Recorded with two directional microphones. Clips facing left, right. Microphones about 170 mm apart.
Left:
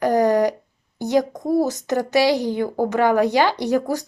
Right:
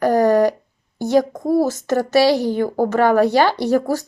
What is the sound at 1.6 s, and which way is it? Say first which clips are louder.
Speech: right 3 dB; 15° left (ahead or behind).